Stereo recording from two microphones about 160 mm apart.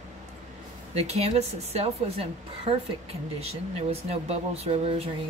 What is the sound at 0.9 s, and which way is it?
A woman's voice, 40° right (ahead or behind).